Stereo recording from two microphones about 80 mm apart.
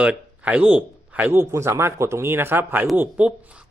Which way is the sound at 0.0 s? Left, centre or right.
Centre.